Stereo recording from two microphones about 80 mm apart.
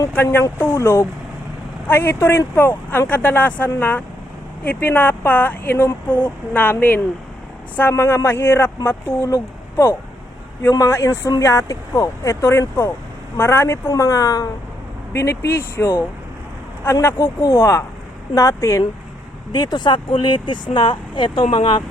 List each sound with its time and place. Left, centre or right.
0.1 s speech: left
7.8 s speech: left
13.9 s a woman's voice: left
15.1 s speech: left
19.5 s speech: left